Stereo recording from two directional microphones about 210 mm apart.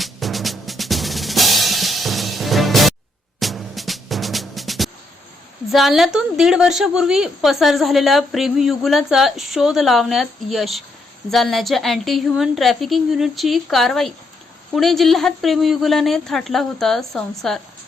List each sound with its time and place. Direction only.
0.0 s drum: centre (ahead or behind)
3.4 s music: centre (ahead or behind)
5.7 s a woman's voice: centre (ahead or behind)